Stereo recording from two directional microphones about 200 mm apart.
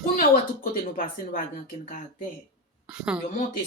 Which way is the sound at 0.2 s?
45° left (ahead or behind).